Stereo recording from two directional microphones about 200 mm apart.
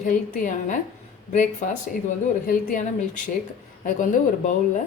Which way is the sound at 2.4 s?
45° left (ahead or behind).